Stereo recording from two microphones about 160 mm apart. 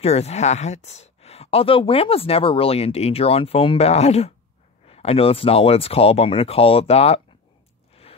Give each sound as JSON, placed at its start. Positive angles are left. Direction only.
{"t": 0.0, "sound": "speech", "side_deg": 40}